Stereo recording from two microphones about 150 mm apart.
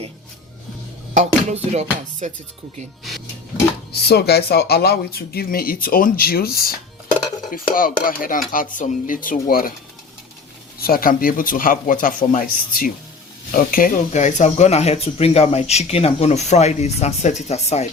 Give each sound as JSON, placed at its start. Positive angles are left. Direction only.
{"t": 1.7, "sound": "music", "side_deg": -50}
{"t": 3.0, "sound": "speech", "side_deg": 0}
{"t": 3.9, "sound": "speech", "side_deg": 90}
{"t": 7.5, "sound": "speech", "side_deg": 70}
{"t": 8.7, "sound": "speech", "side_deg": 60}
{"t": 10.8, "sound": "speech", "side_deg": 80}